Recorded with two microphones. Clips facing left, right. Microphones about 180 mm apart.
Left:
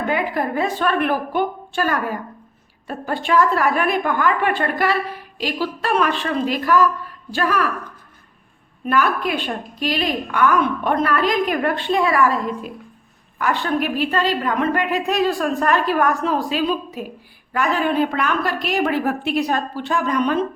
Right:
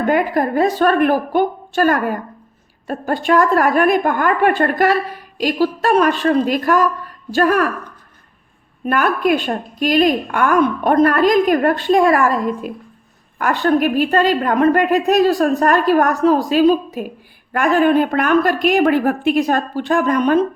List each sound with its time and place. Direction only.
0.1 s a woman's voice: 45° right (ahead or behind)
8.9 s a woman's voice: 50° right (ahead or behind)
13.4 s a woman's voice: 50° right (ahead or behind)